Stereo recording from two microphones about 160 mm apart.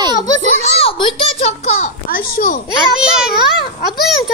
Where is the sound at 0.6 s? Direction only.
35° left (ahead or behind).